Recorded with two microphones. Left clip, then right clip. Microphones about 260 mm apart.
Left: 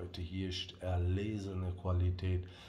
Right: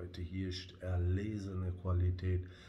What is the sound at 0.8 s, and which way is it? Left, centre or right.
Speech, centre.